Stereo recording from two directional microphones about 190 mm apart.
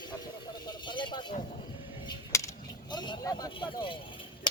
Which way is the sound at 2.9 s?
25° left (ahead or behind).